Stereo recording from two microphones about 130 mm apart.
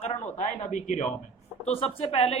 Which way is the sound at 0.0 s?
65° left (ahead or behind).